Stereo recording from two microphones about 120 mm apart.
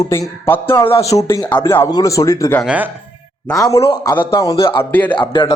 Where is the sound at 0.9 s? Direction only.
55° left (ahead or behind).